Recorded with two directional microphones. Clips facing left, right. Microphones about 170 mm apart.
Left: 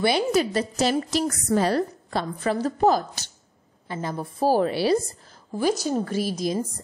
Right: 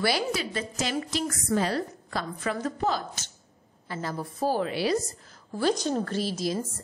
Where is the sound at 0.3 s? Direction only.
40° left (ahead or behind).